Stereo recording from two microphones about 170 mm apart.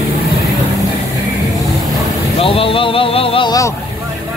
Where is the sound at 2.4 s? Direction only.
35° left (ahead or behind).